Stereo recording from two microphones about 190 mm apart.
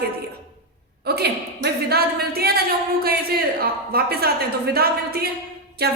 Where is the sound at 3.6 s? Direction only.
55° right (ahead or behind).